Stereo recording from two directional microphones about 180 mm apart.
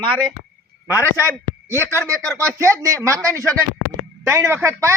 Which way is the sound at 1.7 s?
15° right (ahead or behind).